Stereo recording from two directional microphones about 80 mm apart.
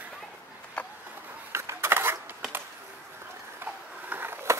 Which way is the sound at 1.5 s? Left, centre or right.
Right.